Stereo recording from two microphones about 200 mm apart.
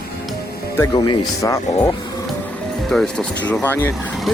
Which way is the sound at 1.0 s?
15° left (ahead or behind).